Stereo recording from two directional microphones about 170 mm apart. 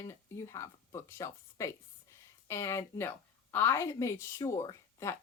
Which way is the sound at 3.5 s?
15° left (ahead or behind).